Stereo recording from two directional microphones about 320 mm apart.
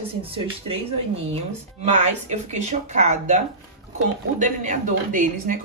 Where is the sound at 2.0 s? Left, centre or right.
Right.